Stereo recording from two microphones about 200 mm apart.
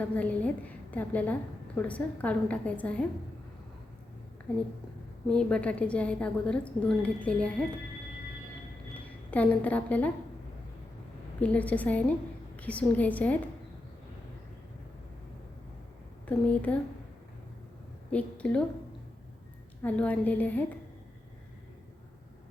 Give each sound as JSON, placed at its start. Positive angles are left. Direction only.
{"t": 0.0, "sound": "a woman's voice", "side_deg": 5}
{"t": 5.3, "sound": "a woman's voice", "side_deg": 5}
{"t": 9.3, "sound": "a woman's voice", "side_deg": 5}
{"t": 11.3, "sound": "a woman's voice", "side_deg": 5}
{"t": 16.2, "sound": "a woman's voice", "side_deg": 5}
{"t": 18.1, "sound": "a woman's voice", "side_deg": 5}
{"t": 19.8, "sound": "a woman's voice", "side_deg": 5}